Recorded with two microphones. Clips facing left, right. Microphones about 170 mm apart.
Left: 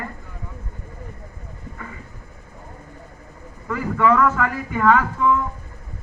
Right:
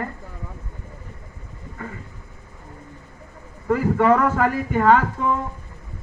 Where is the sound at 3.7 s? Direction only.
45° right (ahead or behind).